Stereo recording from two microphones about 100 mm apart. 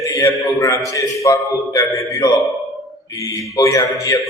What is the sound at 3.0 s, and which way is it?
Mantra, 35° left (ahead or behind).